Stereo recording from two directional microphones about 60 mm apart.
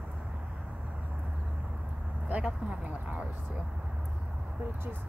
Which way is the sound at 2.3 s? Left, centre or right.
Right.